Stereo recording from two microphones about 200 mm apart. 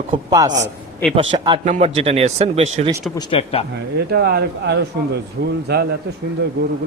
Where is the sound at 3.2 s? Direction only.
30° left (ahead or behind).